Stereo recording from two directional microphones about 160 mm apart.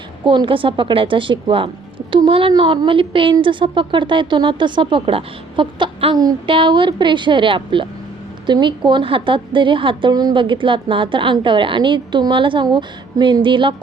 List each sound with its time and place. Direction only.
0.3 s speech: 30° right (ahead or behind)